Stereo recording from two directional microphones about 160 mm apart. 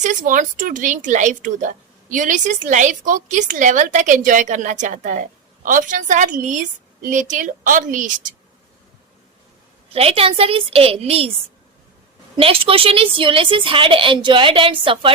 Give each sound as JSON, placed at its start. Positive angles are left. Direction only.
{"t": 0.0, "sound": "speech", "side_deg": -50}
{"t": 9.9, "sound": "a woman's voice", "side_deg": -40}
{"t": 12.4, "sound": "a woman's voice", "side_deg": -35}